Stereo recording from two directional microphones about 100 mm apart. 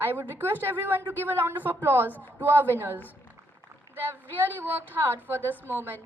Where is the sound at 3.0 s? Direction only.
20° left (ahead or behind).